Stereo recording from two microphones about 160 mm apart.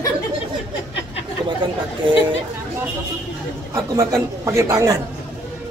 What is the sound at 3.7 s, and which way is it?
Speech, 20° right (ahead or behind).